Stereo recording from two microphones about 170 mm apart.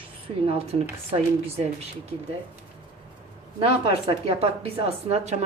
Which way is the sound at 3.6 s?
35° right (ahead or behind).